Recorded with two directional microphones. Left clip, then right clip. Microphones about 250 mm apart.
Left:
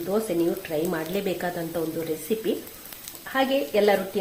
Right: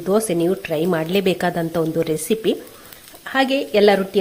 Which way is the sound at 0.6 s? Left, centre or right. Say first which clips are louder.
Right 7 dB; right.